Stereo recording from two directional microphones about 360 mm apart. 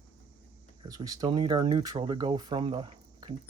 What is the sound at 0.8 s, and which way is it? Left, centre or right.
Speech, centre.